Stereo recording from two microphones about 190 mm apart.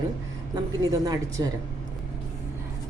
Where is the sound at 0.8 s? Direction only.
20° right (ahead or behind).